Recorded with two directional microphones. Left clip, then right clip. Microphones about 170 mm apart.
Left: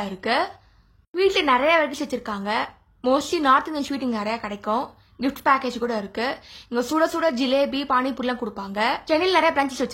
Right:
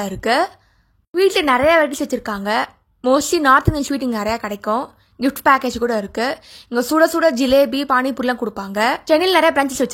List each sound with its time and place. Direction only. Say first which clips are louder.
0.0 s speech: right 6 dB; 40° right (ahead or behind)